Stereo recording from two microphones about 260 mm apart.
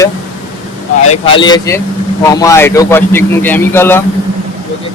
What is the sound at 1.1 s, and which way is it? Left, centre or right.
A man's voice, left.